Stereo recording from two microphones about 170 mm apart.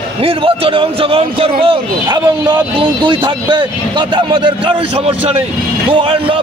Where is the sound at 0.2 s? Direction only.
30° right (ahead or behind).